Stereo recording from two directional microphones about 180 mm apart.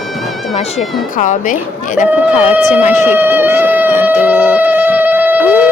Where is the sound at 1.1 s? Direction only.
45° left (ahead or behind).